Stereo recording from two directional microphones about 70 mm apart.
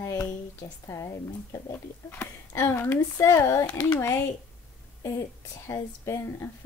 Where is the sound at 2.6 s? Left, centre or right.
Left.